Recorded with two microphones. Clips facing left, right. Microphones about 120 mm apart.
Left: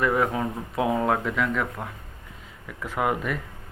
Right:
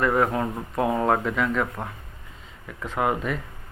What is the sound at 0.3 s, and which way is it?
Speech, centre (ahead or behind).